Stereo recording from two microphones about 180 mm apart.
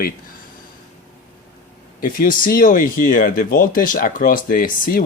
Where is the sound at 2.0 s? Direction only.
50° left (ahead or behind).